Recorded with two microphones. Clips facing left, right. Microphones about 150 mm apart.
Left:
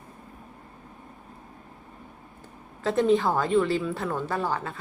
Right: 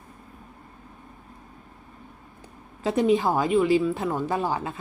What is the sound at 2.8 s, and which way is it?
A woman's voice, 15° right (ahead or behind).